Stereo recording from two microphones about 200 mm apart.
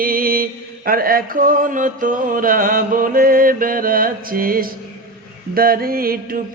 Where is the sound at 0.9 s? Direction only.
45° right (ahead or behind).